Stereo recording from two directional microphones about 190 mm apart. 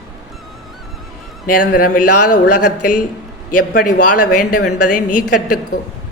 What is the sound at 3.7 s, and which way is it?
Speech, 55° left (ahead or behind).